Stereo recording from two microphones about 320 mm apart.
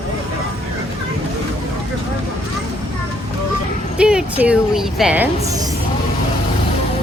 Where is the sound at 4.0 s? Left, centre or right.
Centre.